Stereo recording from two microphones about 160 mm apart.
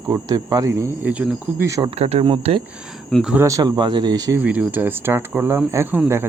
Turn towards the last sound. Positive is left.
turn(degrees=-10)  # may be behind; listen again after turning